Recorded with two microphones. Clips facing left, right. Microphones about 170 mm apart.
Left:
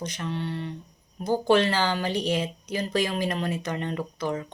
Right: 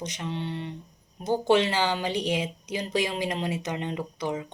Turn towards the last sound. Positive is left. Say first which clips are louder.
# left 1 dB
turn(degrees=-15)  # may be behind; listen again after turning